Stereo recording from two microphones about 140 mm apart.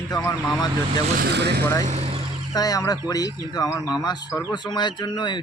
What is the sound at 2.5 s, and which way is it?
Speech, 25° left (ahead or behind).